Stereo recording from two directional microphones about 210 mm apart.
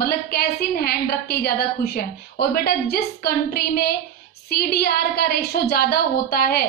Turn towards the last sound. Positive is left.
turn(degrees=45)  # may be behind; listen again after turning